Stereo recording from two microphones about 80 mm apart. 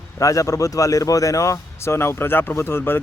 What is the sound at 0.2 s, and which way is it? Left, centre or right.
Speech, left.